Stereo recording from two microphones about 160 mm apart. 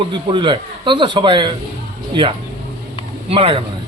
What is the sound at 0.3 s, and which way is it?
Speech, 30° right (ahead or behind).